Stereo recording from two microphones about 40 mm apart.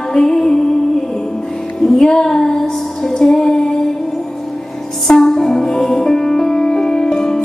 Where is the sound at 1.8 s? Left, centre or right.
Centre.